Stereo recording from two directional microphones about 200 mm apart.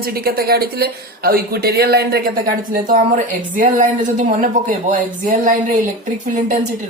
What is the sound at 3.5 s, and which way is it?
Speech, 40° right (ahead or behind).